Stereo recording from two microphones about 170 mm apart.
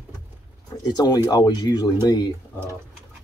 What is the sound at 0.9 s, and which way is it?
Speech, 25° left (ahead or behind).